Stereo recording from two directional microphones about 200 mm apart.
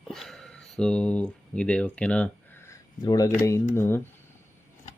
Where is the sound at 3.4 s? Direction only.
15° left (ahead or behind).